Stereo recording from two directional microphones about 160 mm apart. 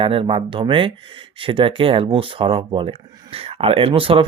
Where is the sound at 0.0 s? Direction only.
35° right (ahead or behind).